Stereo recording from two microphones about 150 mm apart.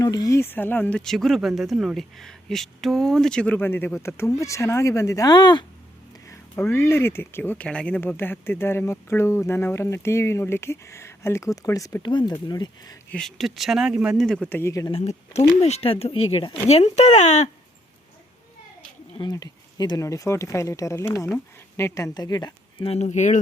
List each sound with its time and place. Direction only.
0.0 s speech: 25° left (ahead or behind)
6.2 s speech: 20° left (ahead or behind)
13.1 s speech: 5° left (ahead or behind)
14.5 s speech: 20° left (ahead or behind)
14.9 s speech: 45° left (ahead or behind)
19.2 s speech: 25° left (ahead or behind)
22.9 s speech: 50° left (ahead or behind)